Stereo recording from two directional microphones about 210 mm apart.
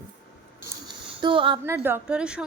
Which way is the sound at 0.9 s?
25° right (ahead or behind).